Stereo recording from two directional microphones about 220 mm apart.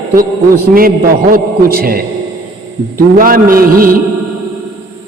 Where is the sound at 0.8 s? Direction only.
40° right (ahead or behind).